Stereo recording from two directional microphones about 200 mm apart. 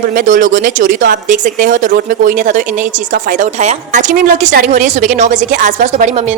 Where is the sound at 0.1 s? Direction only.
40° right (ahead or behind).